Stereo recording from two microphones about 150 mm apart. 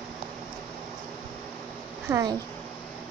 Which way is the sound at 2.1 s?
25° right (ahead or behind).